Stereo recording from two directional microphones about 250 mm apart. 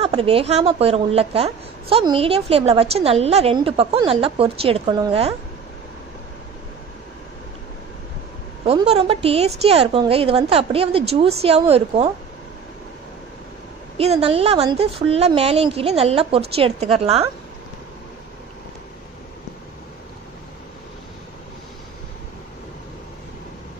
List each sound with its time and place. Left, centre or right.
0.0 s a woman's voice: right
8.6 s a woman's voice: right
13.9 s a woman's voice: right